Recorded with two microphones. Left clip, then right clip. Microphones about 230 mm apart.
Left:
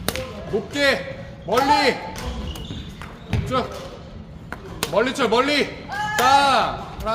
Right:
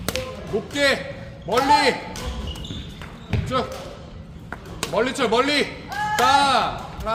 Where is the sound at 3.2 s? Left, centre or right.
Centre.